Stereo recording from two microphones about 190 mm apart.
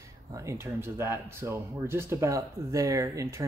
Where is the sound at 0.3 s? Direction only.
15° right (ahead or behind).